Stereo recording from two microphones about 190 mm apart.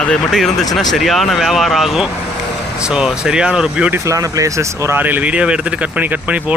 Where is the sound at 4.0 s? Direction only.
15° right (ahead or behind).